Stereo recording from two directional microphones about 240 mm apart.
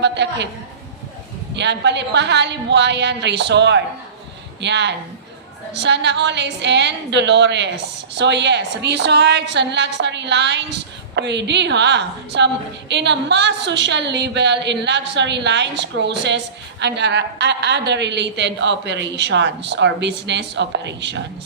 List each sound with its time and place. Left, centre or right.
0.0 s a woman's voice: right
1.5 s a woman's voice: right